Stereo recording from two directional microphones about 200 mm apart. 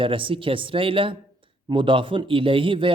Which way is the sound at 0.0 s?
25° right (ahead or behind).